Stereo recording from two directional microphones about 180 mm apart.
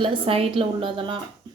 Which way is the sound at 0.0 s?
30° right (ahead or behind).